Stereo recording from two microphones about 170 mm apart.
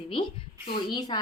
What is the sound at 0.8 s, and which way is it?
Speech, 25° left (ahead or behind).